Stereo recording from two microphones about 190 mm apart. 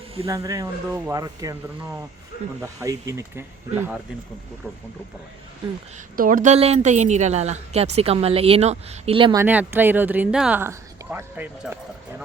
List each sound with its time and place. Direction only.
0.3 s speech: 15° right (ahead or behind)
6.1 s a woman's voice: 45° right (ahead or behind); by 9.4 s 25° right (ahead or behind)
9.4 s speech: 10° right (ahead or behind)